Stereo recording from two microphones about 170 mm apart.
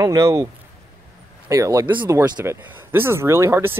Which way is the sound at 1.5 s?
20° right (ahead or behind).